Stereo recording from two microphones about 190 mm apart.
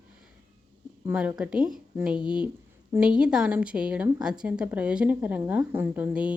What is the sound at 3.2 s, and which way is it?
A woman's voice, 5° right (ahead or behind).